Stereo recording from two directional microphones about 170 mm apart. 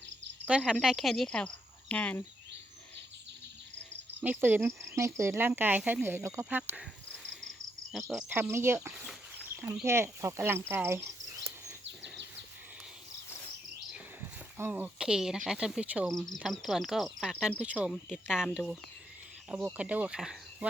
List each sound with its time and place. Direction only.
0.4 s speech: 5° right (ahead or behind)
4.2 s speech: 10° right (ahead or behind)
8.3 s speech: 15° right (ahead or behind)
11.9 s bird vocalization: 90° right
13.9 s speech: 10° right (ahead or behind)